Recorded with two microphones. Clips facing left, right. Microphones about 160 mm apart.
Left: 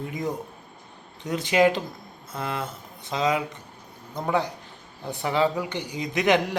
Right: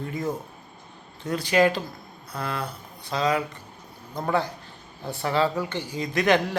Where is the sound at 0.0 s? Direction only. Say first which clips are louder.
Even; 20° left (ahead or behind).